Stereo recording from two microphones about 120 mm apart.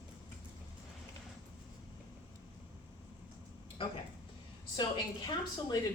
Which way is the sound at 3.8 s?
50° left (ahead or behind).